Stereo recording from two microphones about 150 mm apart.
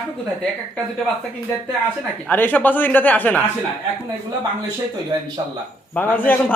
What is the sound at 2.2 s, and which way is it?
A man's voice, 10° left (ahead or behind).